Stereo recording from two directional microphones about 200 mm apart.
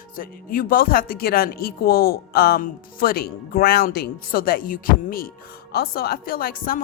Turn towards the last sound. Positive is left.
turn(degrees=45)  # may be behind; listen again after turning